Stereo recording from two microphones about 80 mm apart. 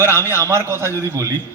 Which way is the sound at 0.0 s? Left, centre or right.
Right.